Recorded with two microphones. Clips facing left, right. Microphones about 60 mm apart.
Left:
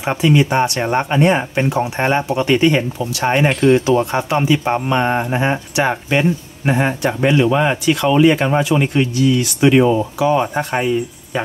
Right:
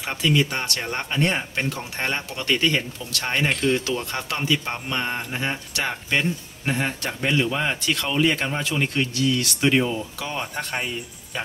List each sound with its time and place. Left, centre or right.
0.0 s speech: left